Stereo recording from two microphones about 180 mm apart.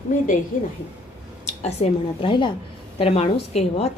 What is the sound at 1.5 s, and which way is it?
A woman's voice, 35° left (ahead or behind).